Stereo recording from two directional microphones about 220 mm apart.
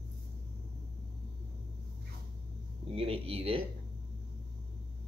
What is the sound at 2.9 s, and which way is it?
Speech, 25° right (ahead or behind).